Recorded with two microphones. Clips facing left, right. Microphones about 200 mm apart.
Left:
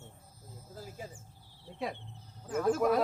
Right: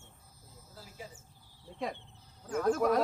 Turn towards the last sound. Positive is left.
turn(degrees=5)  # may be behind; listen again after turning